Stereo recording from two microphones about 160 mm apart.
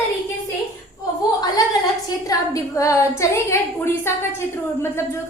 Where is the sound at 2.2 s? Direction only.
20° left (ahead or behind).